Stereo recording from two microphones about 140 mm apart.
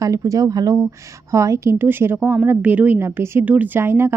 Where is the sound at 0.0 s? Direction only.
25° right (ahead or behind).